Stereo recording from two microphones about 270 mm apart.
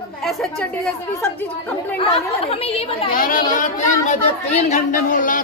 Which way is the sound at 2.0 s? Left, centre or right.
Left.